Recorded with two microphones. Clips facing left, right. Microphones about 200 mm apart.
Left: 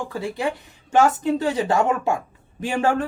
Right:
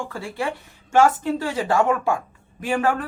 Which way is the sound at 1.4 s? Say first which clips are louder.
Right 1 dB; 20° left (ahead or behind).